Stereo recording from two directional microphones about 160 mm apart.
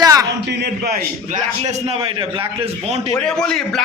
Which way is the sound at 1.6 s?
45° right (ahead or behind).